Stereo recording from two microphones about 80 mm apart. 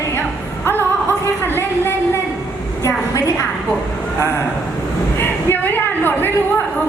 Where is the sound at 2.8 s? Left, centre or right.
Left.